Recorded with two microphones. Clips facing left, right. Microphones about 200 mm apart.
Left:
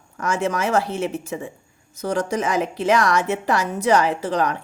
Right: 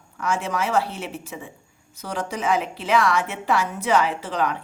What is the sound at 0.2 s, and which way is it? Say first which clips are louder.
A woman's voice: left 3 dB; 45° left (ahead or behind).